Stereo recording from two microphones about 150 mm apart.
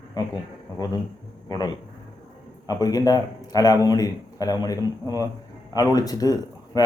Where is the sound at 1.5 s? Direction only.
25° left (ahead or behind).